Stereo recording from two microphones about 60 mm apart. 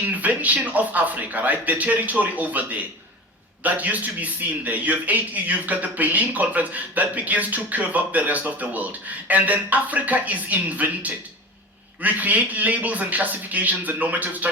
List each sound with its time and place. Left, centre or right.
0.0 s a man's voice: right